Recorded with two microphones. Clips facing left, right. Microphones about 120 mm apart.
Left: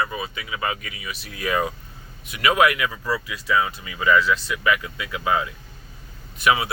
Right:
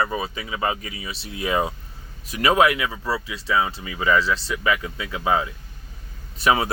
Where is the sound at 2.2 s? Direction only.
35° right (ahead or behind).